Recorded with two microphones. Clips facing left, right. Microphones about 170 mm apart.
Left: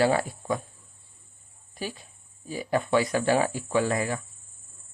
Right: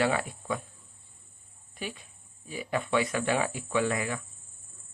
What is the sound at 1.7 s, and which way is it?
Speech, 35° left (ahead or behind).